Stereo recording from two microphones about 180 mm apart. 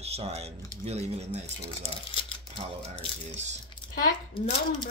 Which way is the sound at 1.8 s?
30° left (ahead or behind).